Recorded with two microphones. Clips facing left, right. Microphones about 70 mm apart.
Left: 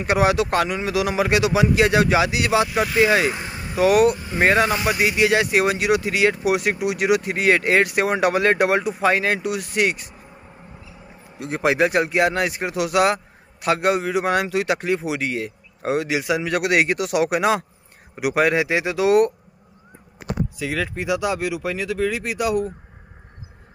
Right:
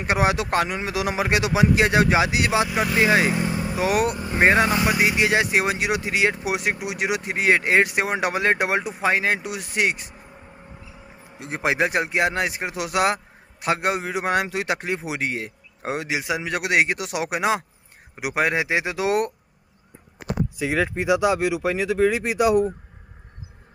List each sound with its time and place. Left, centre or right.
0.0 s speech: right
11.3 s speech: right
20.5 s speech: centre